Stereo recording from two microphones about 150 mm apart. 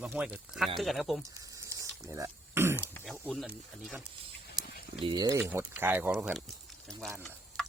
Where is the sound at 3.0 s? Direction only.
5° left (ahead or behind).